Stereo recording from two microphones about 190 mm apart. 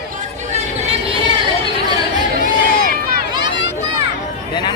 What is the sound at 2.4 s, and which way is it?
Run, 50° left (ahead or behind).